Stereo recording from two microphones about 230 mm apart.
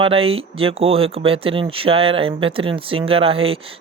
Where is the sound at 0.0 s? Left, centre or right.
Right.